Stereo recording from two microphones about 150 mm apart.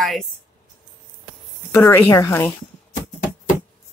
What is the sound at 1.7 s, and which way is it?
Speech, 20° left (ahead or behind).